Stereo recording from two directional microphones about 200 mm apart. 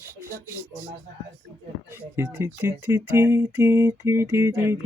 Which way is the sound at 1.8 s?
10° right (ahead or behind).